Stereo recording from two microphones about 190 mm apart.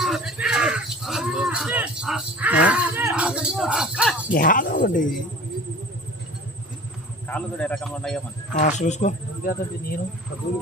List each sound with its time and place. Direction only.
0.0 s speech: centre (ahead or behind)
4.3 s speech: 45° left (ahead or behind)
7.3 s a man's voice: 5° left (ahead or behind)
8.5 s speech: 40° left (ahead or behind)